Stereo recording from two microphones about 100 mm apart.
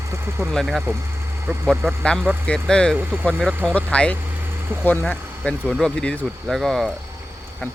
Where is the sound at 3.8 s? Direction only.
10° left (ahead or behind).